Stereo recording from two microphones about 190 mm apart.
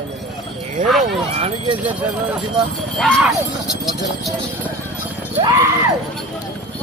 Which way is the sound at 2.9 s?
Centre (ahead or behind).